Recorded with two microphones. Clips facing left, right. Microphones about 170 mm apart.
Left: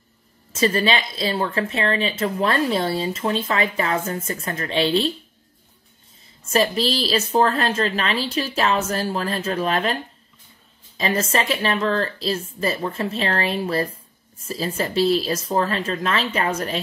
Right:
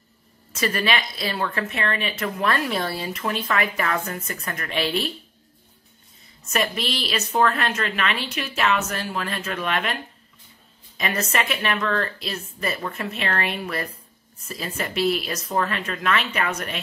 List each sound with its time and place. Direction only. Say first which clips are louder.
0.6 s speech: left 4 dB; 25° left (ahead or behind)
6.5 s a woman's voice: left 5 dB; 35° left (ahead or behind)
11.0 s a woman's voice: left 3 dB; 30° left (ahead or behind)